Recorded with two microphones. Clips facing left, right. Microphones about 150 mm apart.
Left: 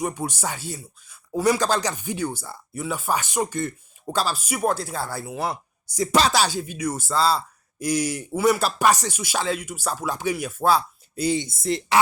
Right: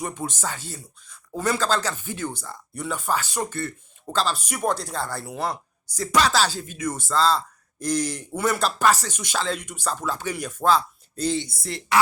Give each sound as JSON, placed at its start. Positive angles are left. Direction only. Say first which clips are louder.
{"t": 0.0, "sound": "speech", "louder": "left 3 dB", "side_deg": 10}
{"t": 6.1, "sound": "speech", "louder": "left 1 dB", "side_deg": 25}
{"t": 6.3, "sound": "speech", "louder": "left 1 dB", "side_deg": 15}
{"t": 11.4, "sound": "speech", "louder": "left 6 dB", "side_deg": 20}